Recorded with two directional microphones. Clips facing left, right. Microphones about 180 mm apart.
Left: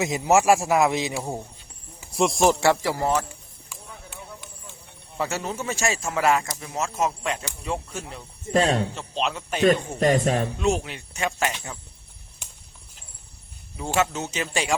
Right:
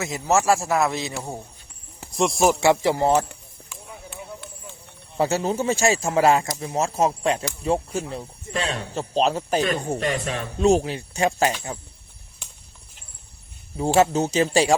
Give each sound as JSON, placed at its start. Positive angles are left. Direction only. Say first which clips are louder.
{"t": 0.0, "sound": "a man's voice", "louder": "left 2 dB", "side_deg": 15}
{"t": 2.1, "sound": "speech", "louder": "even", "side_deg": 0}
{"t": 2.5, "sound": "speech", "louder": "right 2 dB", "side_deg": -15}
{"t": 5.1, "sound": "speech", "louder": "right 6 dB", "side_deg": -30}
{"t": 8.5, "sound": "speech", "louder": "left 6 dB", "side_deg": 45}
{"t": 9.0, "sound": "speech", "louder": "right 7 dB", "side_deg": -40}
{"t": 10.0, "sound": "jingle bell", "louder": "left 5 dB", "side_deg": 40}
{"t": 10.6, "sound": "speech", "louder": "right 6 dB", "side_deg": -35}
{"t": 13.7, "sound": "speech", "louder": "right 6 dB", "side_deg": -35}